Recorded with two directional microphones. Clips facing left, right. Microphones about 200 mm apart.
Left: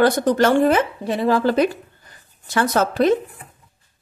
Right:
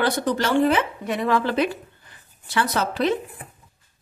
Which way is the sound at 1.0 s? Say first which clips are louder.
Left 4 dB; 30° left (ahead or behind).